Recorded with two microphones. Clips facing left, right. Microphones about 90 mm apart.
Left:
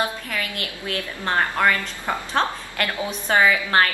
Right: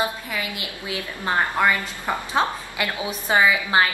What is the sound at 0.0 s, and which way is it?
A woman's voice, 10° right (ahead or behind).